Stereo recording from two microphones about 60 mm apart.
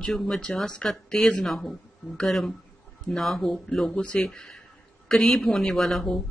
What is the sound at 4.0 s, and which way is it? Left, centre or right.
A man's voice, centre.